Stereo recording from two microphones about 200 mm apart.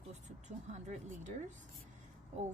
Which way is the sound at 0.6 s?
35° right (ahead or behind).